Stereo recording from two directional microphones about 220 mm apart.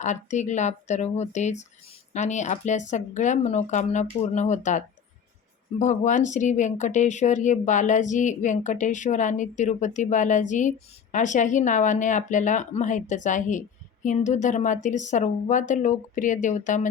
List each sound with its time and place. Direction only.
0.0 s speech: 35° left (ahead or behind)
5.8 s speech: 35° left (ahead or behind)